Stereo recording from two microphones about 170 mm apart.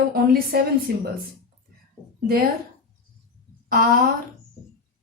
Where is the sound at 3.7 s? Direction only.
60° right (ahead or behind).